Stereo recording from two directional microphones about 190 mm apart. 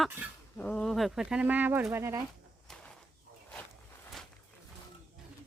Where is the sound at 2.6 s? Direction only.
5° left (ahead or behind).